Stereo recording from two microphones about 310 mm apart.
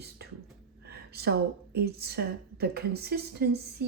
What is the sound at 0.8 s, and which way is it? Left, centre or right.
A woman's voice, right.